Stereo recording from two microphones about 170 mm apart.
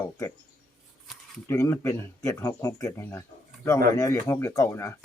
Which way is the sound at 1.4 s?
15° left (ahead or behind).